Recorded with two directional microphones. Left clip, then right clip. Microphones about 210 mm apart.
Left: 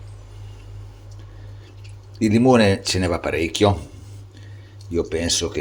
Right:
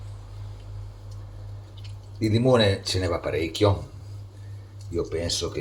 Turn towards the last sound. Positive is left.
turn(degrees=40)  # may be behind; listen again after turning